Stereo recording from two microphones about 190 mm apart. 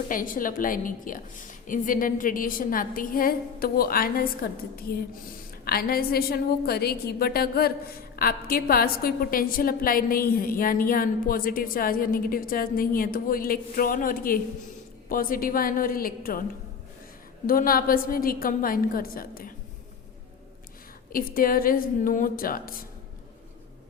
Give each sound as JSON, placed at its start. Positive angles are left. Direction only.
{"t": 0.1, "sound": "a woman's voice", "side_deg": 45}
{"t": 5.6, "sound": "a woman's voice", "side_deg": 50}
{"t": 17.4, "sound": "a woman's voice", "side_deg": 50}
{"t": 21.1, "sound": "a woman's voice", "side_deg": 50}